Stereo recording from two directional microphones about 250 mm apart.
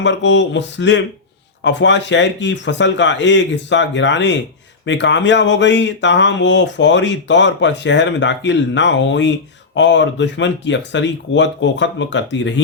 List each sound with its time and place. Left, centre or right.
0.0 s speech: left